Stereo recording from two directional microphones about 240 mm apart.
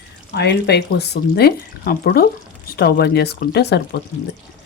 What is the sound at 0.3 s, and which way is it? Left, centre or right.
Speech, left.